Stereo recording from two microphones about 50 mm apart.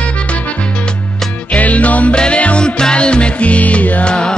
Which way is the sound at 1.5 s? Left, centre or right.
Left.